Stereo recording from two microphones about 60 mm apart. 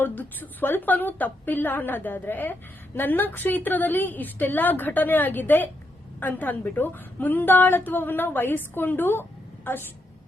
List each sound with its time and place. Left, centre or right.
0.0 s a woman's voice: left